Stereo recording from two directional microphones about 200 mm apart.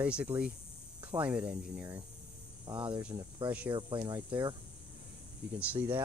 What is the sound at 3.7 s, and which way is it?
Speech, 25° right (ahead or behind).